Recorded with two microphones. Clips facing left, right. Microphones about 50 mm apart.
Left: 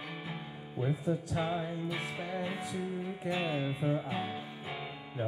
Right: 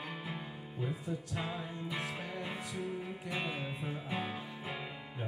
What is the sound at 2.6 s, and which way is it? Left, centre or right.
Music, left.